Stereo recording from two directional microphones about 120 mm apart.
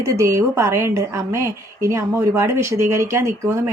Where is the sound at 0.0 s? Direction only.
25° right (ahead or behind).